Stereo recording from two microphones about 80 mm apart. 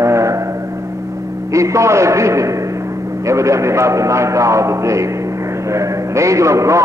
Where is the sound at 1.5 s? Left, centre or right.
Right.